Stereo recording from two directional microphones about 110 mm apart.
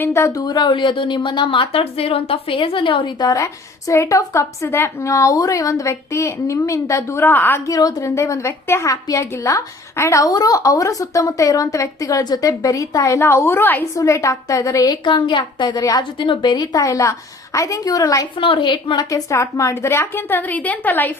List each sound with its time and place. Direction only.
0.0 s a woman's voice: 25° left (ahead or behind)
0.4 s a woman's voice: 40° left (ahead or behind); by 7.7 s 20° left (ahead or behind)
7.7 s a woman's voice: 35° left (ahead or behind)
15.0 s a woman's voice: 45° left (ahead or behind)
16.1 s a woman's voice: 50° left (ahead or behind)
18.3 s a woman's voice: 50° left (ahead or behind)
19.1 s a woman's voice: 30° left (ahead or behind)